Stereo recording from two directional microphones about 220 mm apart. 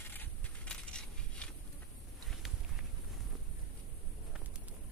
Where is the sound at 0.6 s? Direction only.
5° left (ahead or behind).